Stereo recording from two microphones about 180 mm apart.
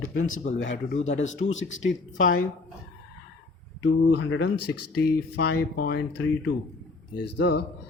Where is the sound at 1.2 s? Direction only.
90° left.